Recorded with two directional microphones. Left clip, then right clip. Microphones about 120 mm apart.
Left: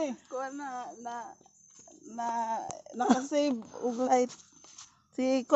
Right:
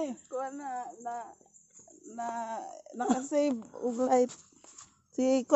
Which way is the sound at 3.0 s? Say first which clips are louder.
Left 1 dB; 30° left (ahead or behind).